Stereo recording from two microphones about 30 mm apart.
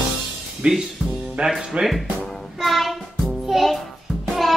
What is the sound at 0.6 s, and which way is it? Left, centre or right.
Speech, right.